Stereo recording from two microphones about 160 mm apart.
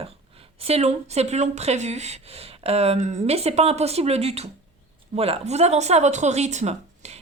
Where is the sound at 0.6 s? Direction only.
40° right (ahead or behind).